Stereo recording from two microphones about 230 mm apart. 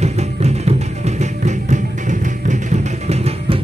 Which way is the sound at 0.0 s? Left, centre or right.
Right.